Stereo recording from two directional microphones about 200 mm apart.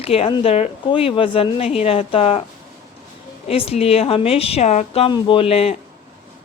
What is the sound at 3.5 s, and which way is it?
Speech, 30° left (ahead or behind).